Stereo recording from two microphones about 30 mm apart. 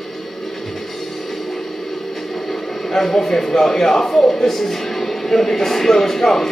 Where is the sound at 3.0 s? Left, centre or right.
Centre.